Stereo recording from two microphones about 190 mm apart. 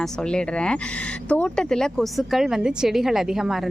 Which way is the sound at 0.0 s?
5° left (ahead or behind).